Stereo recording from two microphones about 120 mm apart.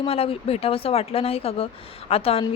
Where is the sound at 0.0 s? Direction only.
50° left (ahead or behind).